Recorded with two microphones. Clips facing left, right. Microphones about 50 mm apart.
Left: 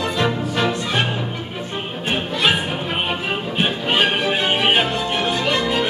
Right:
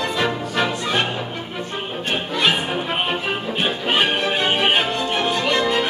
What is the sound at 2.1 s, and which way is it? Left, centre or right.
Music, centre.